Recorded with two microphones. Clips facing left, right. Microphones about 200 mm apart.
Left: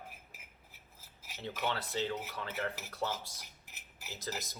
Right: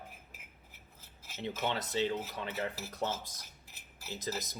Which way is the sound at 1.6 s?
20° right (ahead or behind).